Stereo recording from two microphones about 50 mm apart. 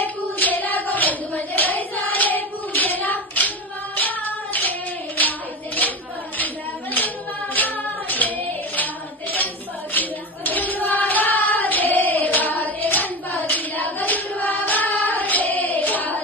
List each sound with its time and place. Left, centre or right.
0.0 s hands: left
7.5 s child singing: left